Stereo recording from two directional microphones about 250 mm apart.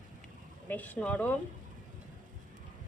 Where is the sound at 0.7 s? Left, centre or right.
Centre.